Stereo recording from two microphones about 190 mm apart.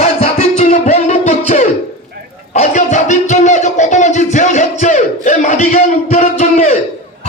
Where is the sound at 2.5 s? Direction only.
40° left (ahead or behind).